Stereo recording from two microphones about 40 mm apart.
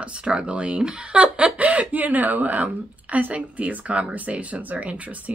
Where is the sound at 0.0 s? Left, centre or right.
Right.